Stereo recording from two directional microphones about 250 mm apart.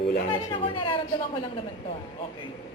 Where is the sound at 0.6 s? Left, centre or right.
Centre.